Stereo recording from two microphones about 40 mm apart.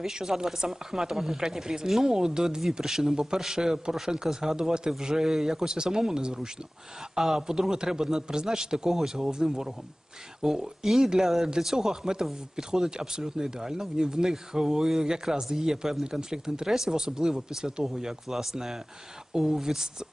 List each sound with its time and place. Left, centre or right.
0.0 s speech: centre